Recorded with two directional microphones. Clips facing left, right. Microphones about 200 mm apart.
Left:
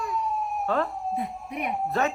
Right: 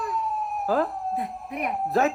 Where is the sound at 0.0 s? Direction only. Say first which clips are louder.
Even; centre (ahead or behind).